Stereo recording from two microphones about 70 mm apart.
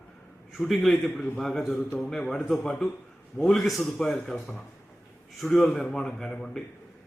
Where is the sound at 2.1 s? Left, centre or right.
Centre.